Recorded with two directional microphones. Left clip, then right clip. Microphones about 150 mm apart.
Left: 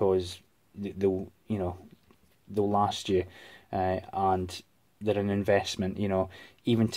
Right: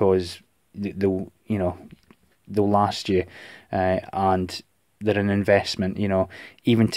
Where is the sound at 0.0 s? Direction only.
45° right (ahead or behind).